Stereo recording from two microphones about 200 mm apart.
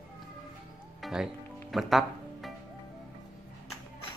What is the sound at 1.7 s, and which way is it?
Speech, centre (ahead or behind).